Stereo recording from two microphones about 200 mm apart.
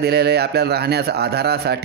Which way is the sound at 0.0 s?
55° right (ahead or behind).